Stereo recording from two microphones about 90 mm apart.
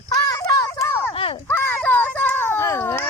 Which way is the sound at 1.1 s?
80° left.